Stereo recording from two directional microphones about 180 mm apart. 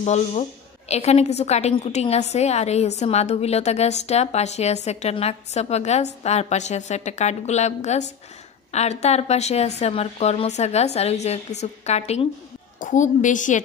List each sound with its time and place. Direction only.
0.0 s a woman's voice: 40° left (ahead or behind)